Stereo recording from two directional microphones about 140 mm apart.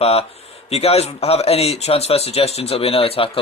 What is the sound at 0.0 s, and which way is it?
Speech, 45° left (ahead or behind).